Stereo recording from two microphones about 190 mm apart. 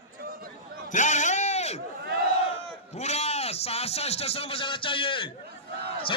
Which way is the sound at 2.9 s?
35° left (ahead or behind).